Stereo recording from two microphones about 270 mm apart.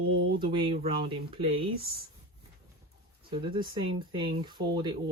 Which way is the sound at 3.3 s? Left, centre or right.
Centre.